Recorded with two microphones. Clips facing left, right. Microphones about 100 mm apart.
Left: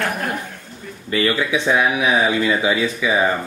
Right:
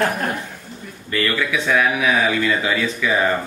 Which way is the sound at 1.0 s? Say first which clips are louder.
Left 2 dB; 20° left (ahead or behind).